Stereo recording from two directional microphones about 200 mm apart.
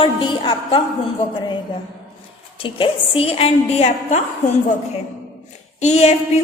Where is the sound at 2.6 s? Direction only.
25° left (ahead or behind).